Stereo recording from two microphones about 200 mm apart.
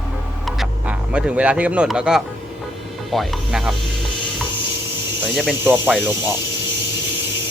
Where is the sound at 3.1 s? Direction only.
Centre (ahead or behind).